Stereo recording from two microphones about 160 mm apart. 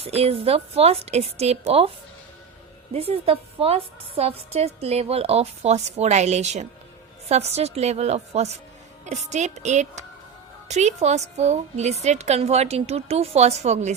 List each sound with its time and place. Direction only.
0.0 s a woman's voice: 40° right (ahead or behind)
2.9 s a woman's voice: 40° right (ahead or behind)